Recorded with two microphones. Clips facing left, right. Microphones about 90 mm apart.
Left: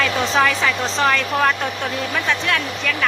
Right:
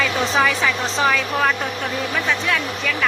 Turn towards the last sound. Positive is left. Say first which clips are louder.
# even
turn(degrees=0)  # may be behind; listen again after turning